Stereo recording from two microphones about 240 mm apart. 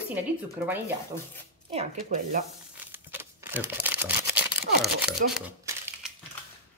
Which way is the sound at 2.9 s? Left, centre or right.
Centre.